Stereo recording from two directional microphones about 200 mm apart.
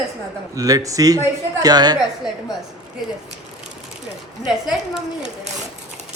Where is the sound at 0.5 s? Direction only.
15° right (ahead or behind).